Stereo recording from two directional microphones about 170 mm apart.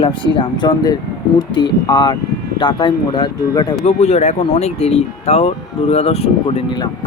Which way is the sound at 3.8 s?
40° left (ahead or behind).